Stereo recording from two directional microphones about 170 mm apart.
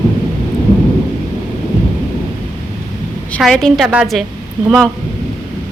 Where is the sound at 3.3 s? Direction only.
5° left (ahead or behind).